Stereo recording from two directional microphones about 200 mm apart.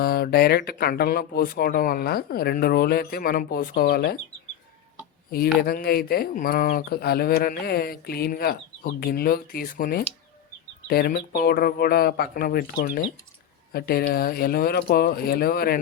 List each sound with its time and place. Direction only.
0.0 s speech: 50° left (ahead or behind)
5.5 s speech: 50° left (ahead or behind)